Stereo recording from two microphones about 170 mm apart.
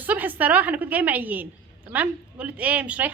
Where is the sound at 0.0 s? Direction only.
10° right (ahead or behind).